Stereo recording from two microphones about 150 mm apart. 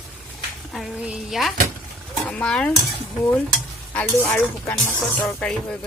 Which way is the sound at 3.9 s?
10° left (ahead or behind).